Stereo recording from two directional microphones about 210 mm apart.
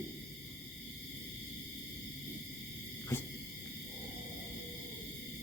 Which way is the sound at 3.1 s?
10° left (ahead or behind).